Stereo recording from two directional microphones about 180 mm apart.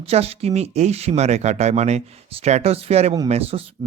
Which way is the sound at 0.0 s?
35° right (ahead or behind).